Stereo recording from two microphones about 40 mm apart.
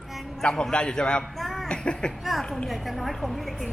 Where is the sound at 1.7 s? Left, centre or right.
Left.